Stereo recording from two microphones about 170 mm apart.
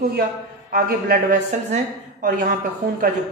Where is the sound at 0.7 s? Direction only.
60° right (ahead or behind).